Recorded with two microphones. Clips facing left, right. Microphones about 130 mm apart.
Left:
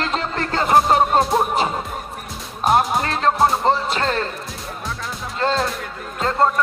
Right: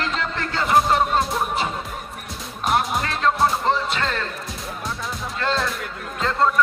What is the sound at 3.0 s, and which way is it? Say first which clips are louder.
Music: left 2 dB; 35° left (ahead or behind).